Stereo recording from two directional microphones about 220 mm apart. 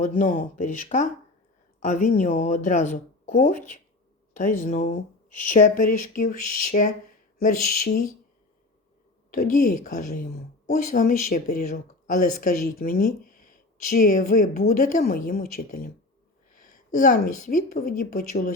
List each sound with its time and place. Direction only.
0.0 s speech: 40° left (ahead or behind)
4.6 s speech: 40° left (ahead or behind)
7.3 s a sound: 45° left (ahead or behind)
9.3 s a woman's voice: 35° left (ahead or behind)